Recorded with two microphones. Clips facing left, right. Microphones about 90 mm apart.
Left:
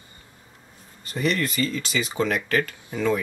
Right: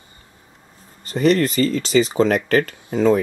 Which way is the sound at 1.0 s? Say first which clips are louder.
Right 8 dB; 40° right (ahead or behind).